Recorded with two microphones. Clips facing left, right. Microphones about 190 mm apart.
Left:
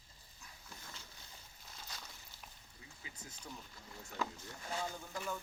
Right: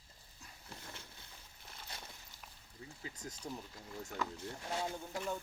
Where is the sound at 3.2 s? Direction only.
40° right (ahead or behind).